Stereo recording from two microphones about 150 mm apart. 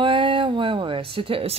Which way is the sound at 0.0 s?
35° right (ahead or behind).